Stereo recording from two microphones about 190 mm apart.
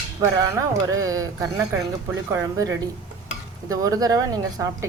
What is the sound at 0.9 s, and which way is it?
A woman's voice, 20° right (ahead or behind).